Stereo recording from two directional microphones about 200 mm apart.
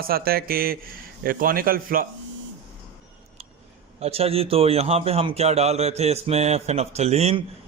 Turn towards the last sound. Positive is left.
turn(degrees=-30)  # may be behind; listen again after turning